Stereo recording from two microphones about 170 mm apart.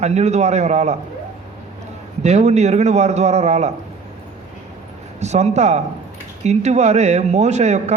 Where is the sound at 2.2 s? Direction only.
40° right (ahead or behind).